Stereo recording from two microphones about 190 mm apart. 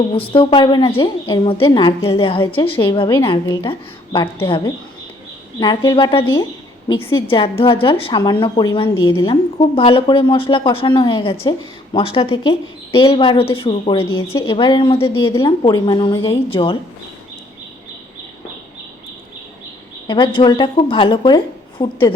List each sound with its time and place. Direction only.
0.1 s a woman's voice: 30° left (ahead or behind)
14.3 s a woman's voice: 20° left (ahead or behind)
20.1 s a woman's voice: 25° left (ahead or behind)